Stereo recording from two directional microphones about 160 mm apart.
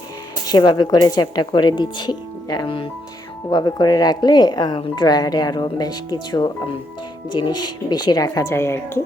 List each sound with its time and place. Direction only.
0.4 s speech: 25° left (ahead or behind)